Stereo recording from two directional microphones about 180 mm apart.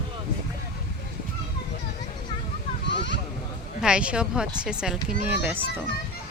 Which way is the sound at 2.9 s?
75° left (ahead or behind).